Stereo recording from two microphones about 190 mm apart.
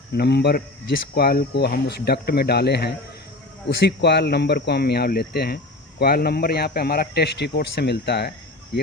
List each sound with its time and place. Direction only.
0.1 s speech: 60° left (ahead or behind)